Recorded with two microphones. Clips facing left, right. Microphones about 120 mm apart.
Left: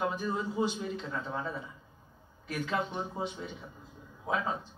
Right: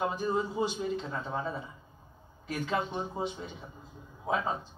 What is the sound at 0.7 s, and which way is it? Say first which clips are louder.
Speech: right 3 dB; 15° right (ahead or behind).